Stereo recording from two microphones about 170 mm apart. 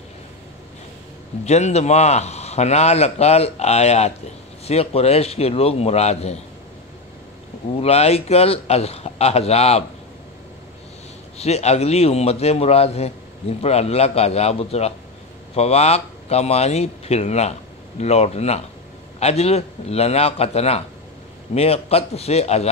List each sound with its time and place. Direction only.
1.4 s a man's voice: 40° left (ahead or behind)
7.7 s a man's voice: 35° left (ahead or behind)
11.3 s a man's voice: 40° left (ahead or behind)